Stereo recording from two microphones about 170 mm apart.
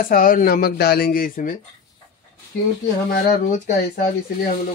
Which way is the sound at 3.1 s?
50° left (ahead or behind).